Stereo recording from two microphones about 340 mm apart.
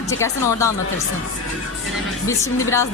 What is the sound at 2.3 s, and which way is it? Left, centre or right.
Speech, centre.